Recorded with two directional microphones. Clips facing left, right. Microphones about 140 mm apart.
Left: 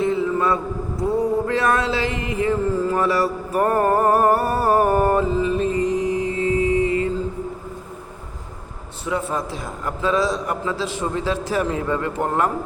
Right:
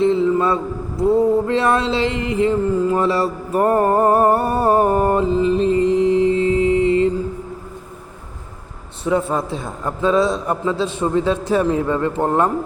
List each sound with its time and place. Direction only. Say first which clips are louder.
0.0 s a sound: right 4 dB; 25° right (ahead or behind)
1.2 s mantra: right 4 dB; 25° right (ahead or behind)
9.0 s a man's voice: right 5 dB; 30° right (ahead or behind)